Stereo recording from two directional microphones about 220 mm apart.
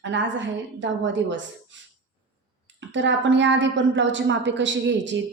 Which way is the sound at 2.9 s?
55° right (ahead or behind).